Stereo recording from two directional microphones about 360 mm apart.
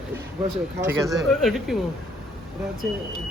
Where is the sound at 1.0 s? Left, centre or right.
Centre.